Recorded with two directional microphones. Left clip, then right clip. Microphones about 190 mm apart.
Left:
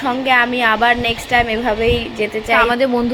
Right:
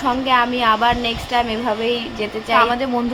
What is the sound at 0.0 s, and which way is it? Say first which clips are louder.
Speech: left 2 dB; 5° left (ahead or behind).